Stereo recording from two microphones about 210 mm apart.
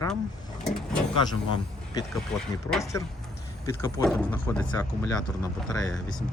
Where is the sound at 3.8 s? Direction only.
15° left (ahead or behind).